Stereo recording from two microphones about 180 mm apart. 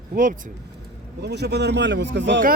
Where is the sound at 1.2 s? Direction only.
70° right (ahead or behind); by 2.4 s 85° right.